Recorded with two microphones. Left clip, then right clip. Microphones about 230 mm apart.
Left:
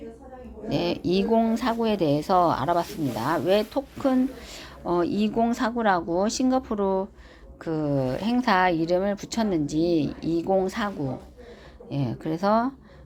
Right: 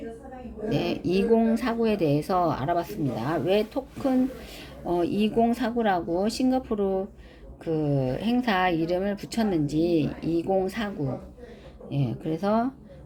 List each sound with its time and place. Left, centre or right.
0.7 s speech: centre